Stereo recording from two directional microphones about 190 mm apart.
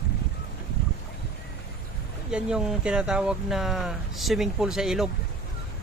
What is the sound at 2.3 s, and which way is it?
Speech, 5° right (ahead or behind).